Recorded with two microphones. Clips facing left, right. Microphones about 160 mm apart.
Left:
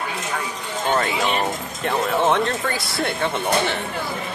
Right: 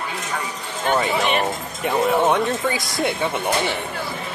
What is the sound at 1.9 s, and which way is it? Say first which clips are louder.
Speech: right 2 dB; 5° right (ahead or behind).